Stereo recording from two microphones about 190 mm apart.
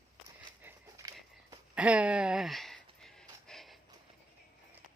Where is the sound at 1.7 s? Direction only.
5° right (ahead or behind).